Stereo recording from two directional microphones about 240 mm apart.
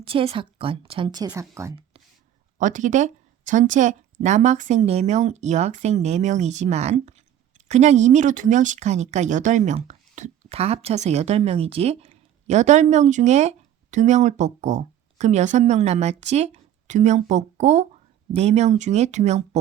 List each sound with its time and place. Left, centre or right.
0.0 s speech: right
2.6 s speech: right